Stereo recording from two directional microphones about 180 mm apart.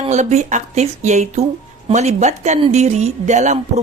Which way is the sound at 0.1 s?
40° right (ahead or behind).